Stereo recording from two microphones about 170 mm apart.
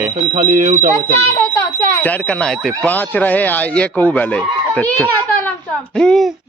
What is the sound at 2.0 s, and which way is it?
Speech, 10° left (ahead or behind).